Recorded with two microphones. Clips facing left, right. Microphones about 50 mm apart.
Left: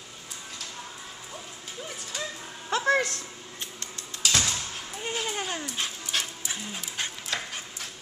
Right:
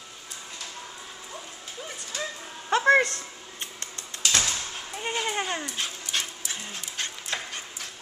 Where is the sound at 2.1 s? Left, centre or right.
Centre.